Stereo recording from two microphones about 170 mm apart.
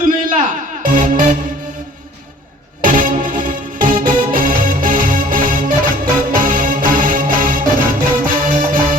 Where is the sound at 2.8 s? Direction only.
50° right (ahead or behind).